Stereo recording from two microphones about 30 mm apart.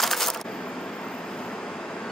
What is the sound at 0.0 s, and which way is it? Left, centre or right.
Coin, centre.